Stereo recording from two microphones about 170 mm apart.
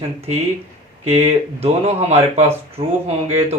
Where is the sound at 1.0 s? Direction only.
40° right (ahead or behind).